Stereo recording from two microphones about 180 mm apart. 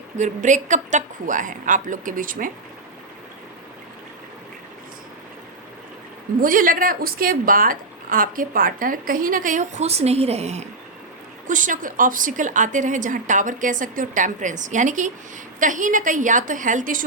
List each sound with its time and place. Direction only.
0.2 s a woman's voice: 45° right (ahead or behind)
6.4 s a woman's voice: 50° right (ahead or behind)